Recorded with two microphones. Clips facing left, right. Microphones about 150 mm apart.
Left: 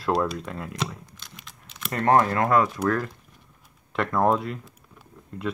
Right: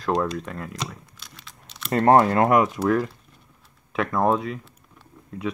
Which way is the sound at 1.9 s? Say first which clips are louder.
Right 4 dB; 30° right (ahead or behind).